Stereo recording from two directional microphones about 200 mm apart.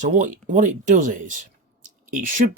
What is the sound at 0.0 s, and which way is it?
Speech, 40° right (ahead or behind).